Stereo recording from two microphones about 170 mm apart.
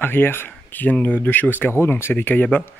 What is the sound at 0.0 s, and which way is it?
Speech, 10° left (ahead or behind).